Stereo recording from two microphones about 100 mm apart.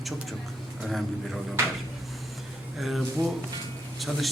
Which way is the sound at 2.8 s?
Centre (ahead or behind).